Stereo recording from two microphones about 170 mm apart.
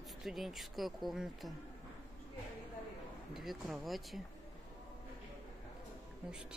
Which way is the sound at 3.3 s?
Centre (ahead or behind).